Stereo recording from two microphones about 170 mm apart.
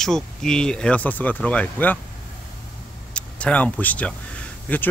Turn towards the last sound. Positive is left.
turn(degrees=10)  # may be behind; listen again after turning